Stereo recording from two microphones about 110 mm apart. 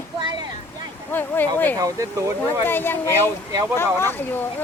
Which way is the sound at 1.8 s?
30° right (ahead or behind).